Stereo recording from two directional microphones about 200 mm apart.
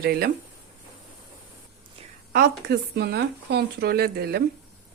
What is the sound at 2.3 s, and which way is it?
Speech, 50° right (ahead or behind).